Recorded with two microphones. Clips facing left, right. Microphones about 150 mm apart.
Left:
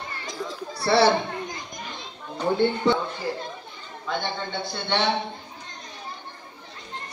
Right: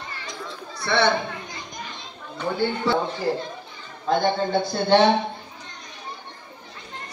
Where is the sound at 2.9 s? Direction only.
20° left (ahead or behind).